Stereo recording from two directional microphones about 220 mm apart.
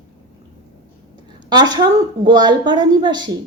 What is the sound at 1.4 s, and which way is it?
A woman's voice, 20° right (ahead or behind).